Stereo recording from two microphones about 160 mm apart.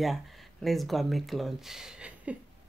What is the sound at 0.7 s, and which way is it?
Speech, centre (ahead or behind).